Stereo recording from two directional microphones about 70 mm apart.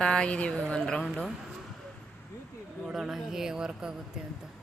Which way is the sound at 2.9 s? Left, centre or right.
Centre.